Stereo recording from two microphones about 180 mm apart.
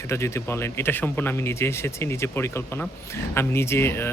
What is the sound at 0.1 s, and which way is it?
Speech, 15° left (ahead or behind).